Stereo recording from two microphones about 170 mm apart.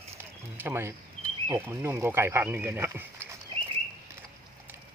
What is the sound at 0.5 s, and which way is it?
Speech, 15° right (ahead or behind).